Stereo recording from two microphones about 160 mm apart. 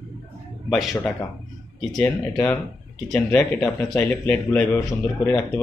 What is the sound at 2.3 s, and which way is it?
Speech, 15° left (ahead or behind).